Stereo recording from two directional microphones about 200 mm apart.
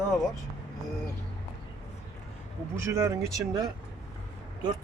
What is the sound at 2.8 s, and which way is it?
Speech, 15° right (ahead or behind).